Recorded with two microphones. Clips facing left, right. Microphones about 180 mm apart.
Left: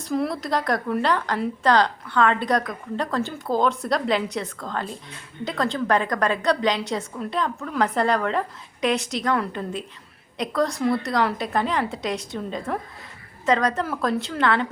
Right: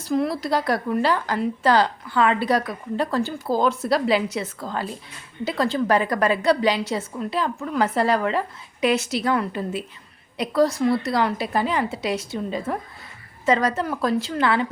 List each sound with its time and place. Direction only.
0.0 s speech: centre (ahead or behind)